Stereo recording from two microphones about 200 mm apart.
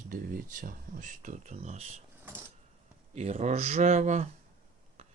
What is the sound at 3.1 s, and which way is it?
Speech, 35° right (ahead or behind).